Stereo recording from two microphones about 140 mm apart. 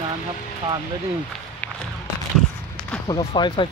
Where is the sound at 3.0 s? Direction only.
35° left (ahead or behind).